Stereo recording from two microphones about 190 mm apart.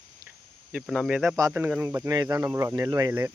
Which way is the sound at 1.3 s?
15° right (ahead or behind).